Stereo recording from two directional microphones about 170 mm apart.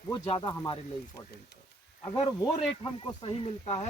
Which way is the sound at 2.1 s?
25° left (ahead or behind).